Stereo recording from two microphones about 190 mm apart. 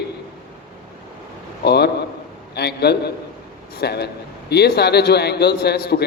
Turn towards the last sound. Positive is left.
turn(degrees=55)  # may be behind; listen again after turning